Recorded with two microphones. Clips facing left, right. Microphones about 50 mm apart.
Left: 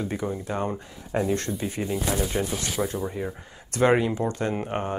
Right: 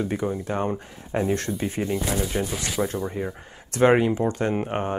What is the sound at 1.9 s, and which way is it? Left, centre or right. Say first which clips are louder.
Speech: right 1 dB; centre.